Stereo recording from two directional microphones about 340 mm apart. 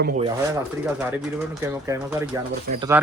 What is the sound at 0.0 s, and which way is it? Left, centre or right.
Speech, right.